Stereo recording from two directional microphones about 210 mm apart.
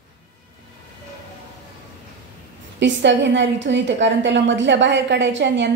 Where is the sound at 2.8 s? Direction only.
60° right (ahead or behind).